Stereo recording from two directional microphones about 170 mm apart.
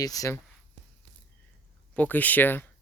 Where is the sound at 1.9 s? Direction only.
10° left (ahead or behind).